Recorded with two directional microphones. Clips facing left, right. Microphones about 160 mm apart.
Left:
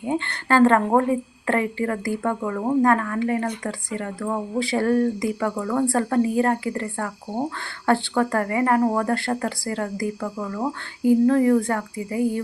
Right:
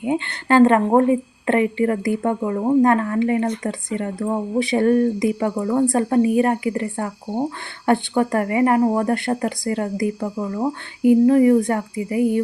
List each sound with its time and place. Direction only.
0.0 s speech: 20° right (ahead or behind)